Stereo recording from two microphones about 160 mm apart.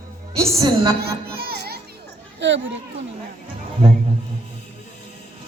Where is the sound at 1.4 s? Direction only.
75° right (ahead or behind).